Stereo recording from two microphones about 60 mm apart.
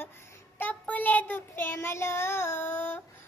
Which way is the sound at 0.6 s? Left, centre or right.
Left.